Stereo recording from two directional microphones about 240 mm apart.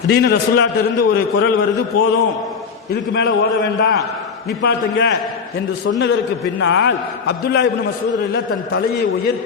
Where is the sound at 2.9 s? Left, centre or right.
Left.